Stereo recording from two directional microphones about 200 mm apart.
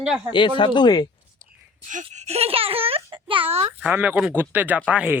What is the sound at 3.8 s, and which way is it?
Speech, 10° right (ahead or behind).